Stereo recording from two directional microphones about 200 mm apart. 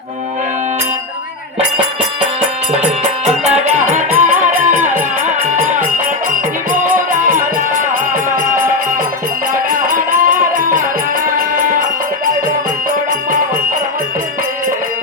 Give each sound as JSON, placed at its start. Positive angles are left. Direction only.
{"t": 2.7, "sound": "music", "side_deg": -35}
{"t": 9.6, "sound": "music", "side_deg": -45}